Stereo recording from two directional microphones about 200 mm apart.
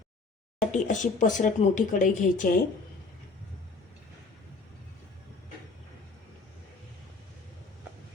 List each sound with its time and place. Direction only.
0.7 s speech: 35° left (ahead or behind)